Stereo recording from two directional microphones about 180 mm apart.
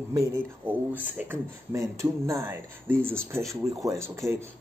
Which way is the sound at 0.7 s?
10° right (ahead or behind).